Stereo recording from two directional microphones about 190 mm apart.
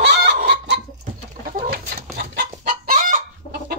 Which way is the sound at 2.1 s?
60° right (ahead or behind).